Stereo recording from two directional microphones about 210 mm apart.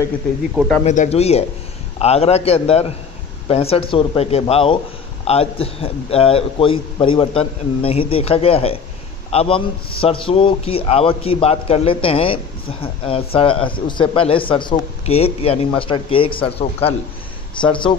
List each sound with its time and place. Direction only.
0.8 s a man's voice: 35° left (ahead or behind)